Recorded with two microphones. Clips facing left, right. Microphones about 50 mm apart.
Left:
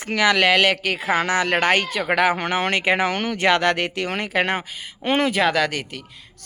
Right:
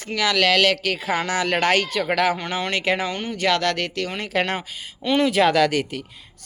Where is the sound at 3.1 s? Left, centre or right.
Left.